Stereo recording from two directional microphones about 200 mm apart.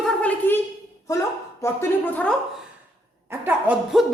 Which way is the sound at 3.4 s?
5° right (ahead or behind).